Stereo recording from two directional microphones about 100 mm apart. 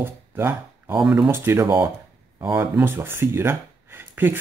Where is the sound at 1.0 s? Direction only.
10° right (ahead or behind).